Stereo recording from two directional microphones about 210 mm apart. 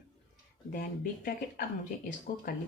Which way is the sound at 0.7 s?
40° left (ahead or behind).